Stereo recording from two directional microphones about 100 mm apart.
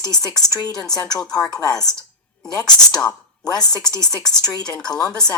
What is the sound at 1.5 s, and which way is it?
Speech, 40° left (ahead or behind).